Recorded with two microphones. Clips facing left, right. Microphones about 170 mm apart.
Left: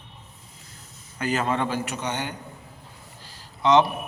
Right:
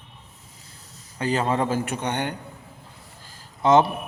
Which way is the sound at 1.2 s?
30° right (ahead or behind).